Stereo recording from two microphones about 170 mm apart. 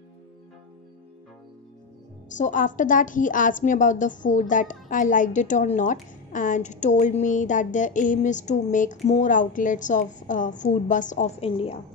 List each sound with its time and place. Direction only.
2.3 s a woman's voice: 50° left (ahead or behind)